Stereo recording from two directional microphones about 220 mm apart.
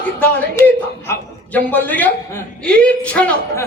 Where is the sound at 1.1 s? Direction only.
5° left (ahead or behind).